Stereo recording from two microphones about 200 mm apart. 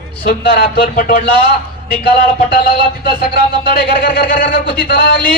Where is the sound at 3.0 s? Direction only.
50° left (ahead or behind).